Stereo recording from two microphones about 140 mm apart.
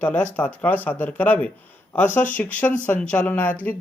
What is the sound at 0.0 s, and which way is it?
Speech, 10° left (ahead or behind).